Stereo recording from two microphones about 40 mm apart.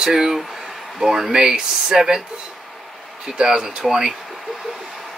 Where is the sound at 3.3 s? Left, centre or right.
Centre.